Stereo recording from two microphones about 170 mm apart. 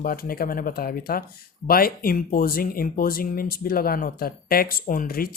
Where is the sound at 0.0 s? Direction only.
60° left (ahead or behind).